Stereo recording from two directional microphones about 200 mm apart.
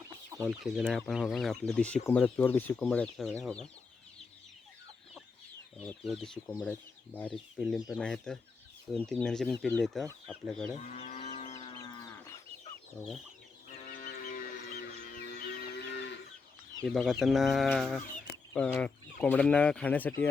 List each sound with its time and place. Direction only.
0.3 s speech: centre (ahead or behind)
5.7 s chicken: centre (ahead or behind)
6.1 s speech: centre (ahead or behind)
10.8 s cattle: 35° left (ahead or behind)
13.8 s music: 40° left (ahead or behind); by 16.1 s 60° left (ahead or behind)
16.8 s speech: centre (ahead or behind)